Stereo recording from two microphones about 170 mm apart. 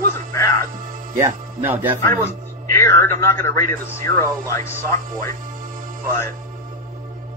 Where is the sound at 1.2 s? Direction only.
15° right (ahead or behind).